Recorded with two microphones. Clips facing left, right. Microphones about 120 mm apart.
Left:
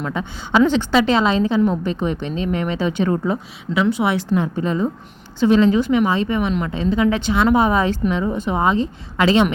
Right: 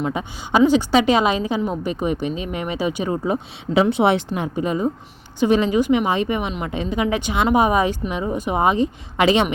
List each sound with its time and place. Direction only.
0.0 s a woman's voice: 15° right (ahead or behind)